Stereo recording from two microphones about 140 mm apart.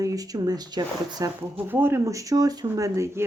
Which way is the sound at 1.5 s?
15° right (ahead or behind).